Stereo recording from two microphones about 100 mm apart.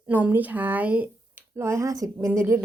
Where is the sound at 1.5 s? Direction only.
25° right (ahead or behind).